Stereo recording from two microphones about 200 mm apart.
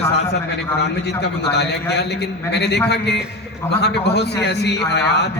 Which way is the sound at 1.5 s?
55° left (ahead or behind).